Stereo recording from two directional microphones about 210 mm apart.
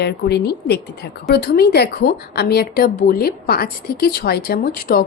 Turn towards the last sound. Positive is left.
turn(degrees=45)  # may be behind; listen again after turning